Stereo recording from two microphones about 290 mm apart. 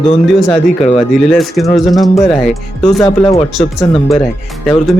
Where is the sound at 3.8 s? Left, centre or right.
Centre.